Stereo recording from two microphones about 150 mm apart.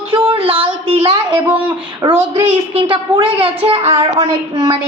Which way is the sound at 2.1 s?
40° right (ahead or behind).